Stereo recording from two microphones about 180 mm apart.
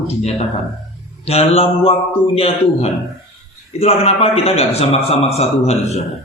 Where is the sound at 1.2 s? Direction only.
35° left (ahead or behind).